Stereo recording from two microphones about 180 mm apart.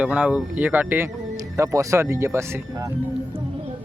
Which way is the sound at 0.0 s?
5° right (ahead or behind).